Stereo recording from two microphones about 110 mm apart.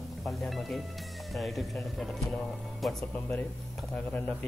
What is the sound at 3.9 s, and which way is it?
Speech, 15° left (ahead or behind).